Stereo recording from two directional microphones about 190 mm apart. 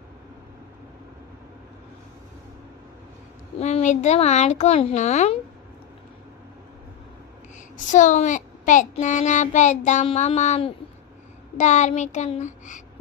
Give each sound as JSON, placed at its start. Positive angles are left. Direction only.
{"t": 3.5, "sound": "speech", "side_deg": 35}
{"t": 7.9, "sound": "a woman's voice", "side_deg": 40}